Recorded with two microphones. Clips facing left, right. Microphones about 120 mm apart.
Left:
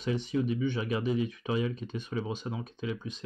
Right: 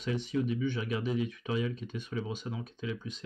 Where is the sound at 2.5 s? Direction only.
30° left (ahead or behind).